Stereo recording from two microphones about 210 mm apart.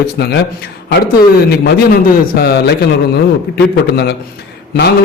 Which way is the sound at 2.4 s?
50° left (ahead or behind).